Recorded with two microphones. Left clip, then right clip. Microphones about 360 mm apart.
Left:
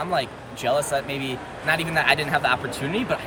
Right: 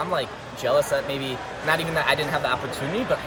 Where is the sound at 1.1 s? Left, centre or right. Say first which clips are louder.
Right 1 dB; centre.